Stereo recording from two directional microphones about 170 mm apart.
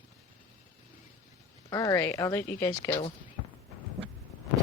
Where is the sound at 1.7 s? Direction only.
20° left (ahead or behind).